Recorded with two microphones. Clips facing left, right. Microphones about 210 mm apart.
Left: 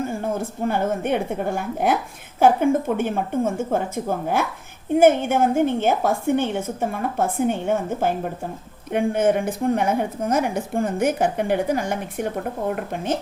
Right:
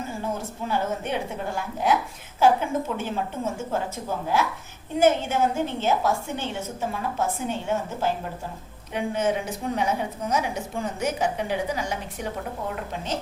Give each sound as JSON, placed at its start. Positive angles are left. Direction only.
{"t": 0.6, "sound": "a woman's voice", "side_deg": 55}